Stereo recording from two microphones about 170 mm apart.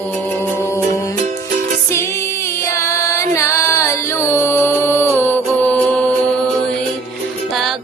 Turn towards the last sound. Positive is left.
turn(degrees=0)  # may be behind; listen again after turning